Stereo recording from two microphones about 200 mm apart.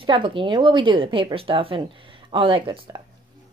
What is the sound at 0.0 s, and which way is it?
Speech, 25° right (ahead or behind).